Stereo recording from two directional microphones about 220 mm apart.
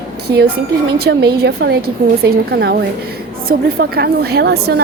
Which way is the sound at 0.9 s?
45° right (ahead or behind).